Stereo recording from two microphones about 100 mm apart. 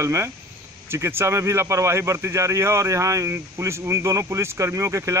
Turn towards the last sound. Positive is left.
turn(degrees=-30)  # may be behind; listen again after turning